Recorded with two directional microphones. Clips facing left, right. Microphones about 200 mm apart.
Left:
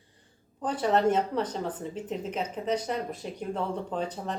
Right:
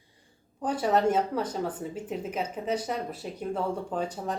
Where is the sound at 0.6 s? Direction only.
10° right (ahead or behind).